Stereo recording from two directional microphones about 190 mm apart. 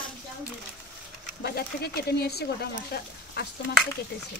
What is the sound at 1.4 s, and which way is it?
Speech, 55° left (ahead or behind).